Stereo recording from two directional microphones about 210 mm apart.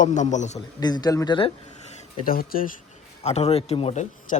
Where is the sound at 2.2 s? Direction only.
45° left (ahead or behind).